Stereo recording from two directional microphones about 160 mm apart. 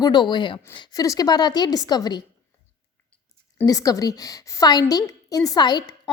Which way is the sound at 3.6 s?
20° left (ahead or behind).